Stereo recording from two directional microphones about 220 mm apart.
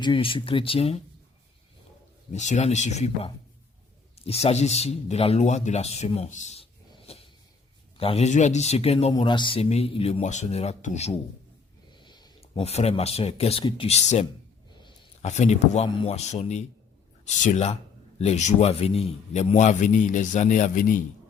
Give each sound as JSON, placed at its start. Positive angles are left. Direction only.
{"t": 0.0, "sound": "speech", "side_deg": 25}
{"t": 2.3, "sound": "a man's voice", "side_deg": 30}
{"t": 7.9, "sound": "speech", "side_deg": 25}
{"t": 11.9, "sound": "a man's voice", "side_deg": 20}